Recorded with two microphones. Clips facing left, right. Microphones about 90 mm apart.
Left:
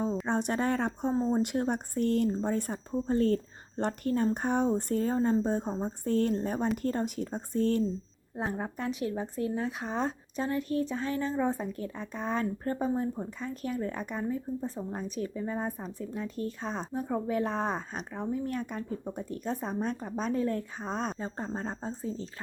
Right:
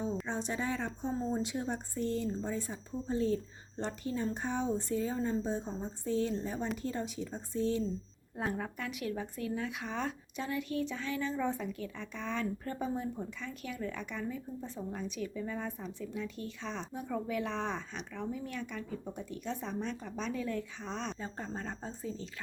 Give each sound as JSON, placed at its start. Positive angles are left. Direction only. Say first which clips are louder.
{"t": 0.3, "sound": "a woman's voice", "louder": "left 7 dB", "side_deg": 60}
{"t": 8.4, "sound": "speech", "louder": "left 3 dB", "side_deg": 30}